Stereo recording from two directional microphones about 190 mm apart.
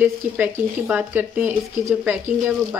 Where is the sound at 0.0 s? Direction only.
10° right (ahead or behind).